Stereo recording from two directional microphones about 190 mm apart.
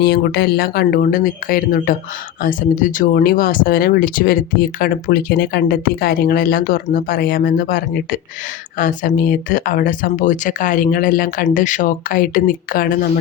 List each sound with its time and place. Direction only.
0.0 s speech: 55° left (ahead or behind)